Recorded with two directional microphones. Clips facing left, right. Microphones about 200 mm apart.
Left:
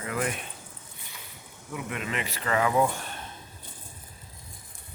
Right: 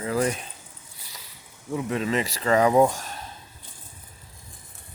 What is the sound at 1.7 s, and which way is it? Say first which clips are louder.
Speech: right 8 dB; 30° right (ahead or behind).